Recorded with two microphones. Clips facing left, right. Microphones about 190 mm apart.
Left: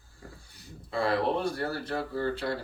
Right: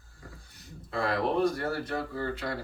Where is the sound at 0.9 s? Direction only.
30° left (ahead or behind).